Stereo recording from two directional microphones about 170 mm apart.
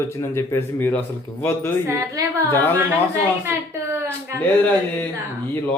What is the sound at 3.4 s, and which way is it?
Speech, 15° right (ahead or behind).